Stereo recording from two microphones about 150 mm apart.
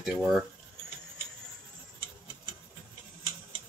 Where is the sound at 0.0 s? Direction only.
Centre (ahead or behind).